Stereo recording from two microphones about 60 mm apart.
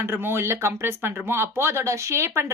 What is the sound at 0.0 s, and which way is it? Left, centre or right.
Speech, right.